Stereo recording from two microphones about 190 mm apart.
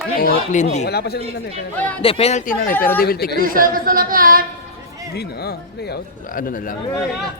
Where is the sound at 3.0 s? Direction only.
55° left (ahead or behind).